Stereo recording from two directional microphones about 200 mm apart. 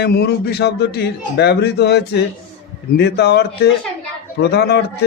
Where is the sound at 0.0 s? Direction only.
55° left (ahead or behind).